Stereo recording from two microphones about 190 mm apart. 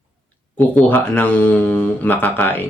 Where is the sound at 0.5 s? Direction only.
10° left (ahead or behind).